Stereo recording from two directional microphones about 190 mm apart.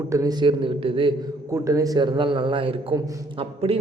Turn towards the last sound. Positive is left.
turn(degrees=-30)  # may be behind; listen again after turning